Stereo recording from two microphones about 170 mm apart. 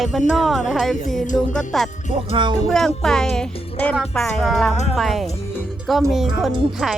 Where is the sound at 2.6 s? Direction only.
Centre (ahead or behind).